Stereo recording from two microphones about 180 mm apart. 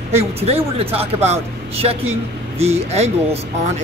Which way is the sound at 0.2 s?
35° right (ahead or behind).